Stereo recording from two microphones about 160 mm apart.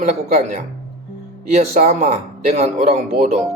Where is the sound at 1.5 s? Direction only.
45° right (ahead or behind).